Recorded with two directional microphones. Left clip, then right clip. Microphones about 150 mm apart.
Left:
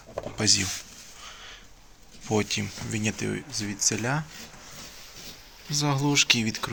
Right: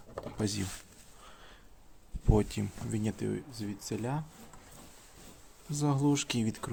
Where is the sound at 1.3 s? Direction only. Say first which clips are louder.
Left 11 dB; 35° right (ahead or behind).